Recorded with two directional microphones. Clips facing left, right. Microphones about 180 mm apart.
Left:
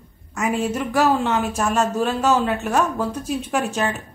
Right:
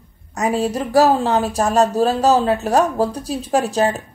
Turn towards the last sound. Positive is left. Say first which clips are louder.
# right 5 dB
turn(degrees=-35)  # may be behind; listen again after turning